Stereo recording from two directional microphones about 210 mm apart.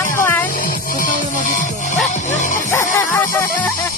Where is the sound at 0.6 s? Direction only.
40° left (ahead or behind).